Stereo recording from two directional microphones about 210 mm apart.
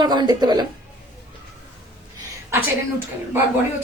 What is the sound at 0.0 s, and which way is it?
Speech, 20° right (ahead or behind).